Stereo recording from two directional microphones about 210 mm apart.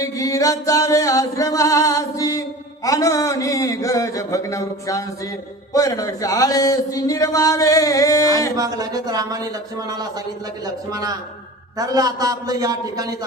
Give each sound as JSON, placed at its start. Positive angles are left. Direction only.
{"t": 0.0, "sound": "music", "side_deg": 15}
{"t": 2.8, "sound": "a man's voice", "side_deg": 15}
{"t": 8.5, "sound": "a man's voice", "side_deg": -15}
{"t": 11.8, "sound": "a man's voice", "side_deg": -15}